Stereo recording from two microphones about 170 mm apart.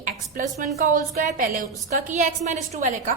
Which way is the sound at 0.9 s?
50° right (ahead or behind).